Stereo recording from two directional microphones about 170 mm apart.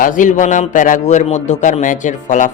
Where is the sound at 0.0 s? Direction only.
50° left (ahead or behind).